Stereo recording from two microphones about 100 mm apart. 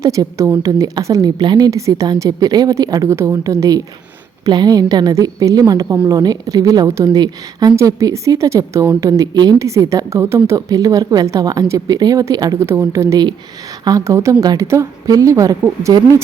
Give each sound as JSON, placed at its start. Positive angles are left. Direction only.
{"t": 0.0, "sound": "a woman's voice", "side_deg": -35}
{"t": 1.7, "sound": "a woman's voice", "side_deg": -35}
{"t": 9.6, "sound": "a woman's voice", "side_deg": -30}
{"t": 14.4, "sound": "a woman's voice", "side_deg": -40}